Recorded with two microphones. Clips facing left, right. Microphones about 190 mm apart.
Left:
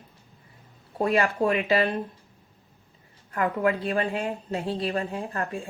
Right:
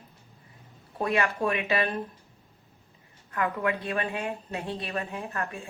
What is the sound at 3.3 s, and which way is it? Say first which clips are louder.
Speech: left 4 dB; 30° left (ahead or behind).